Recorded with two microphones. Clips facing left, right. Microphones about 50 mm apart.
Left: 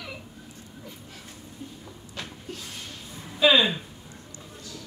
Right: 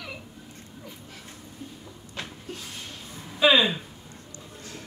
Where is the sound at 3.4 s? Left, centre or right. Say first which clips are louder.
Even; centre.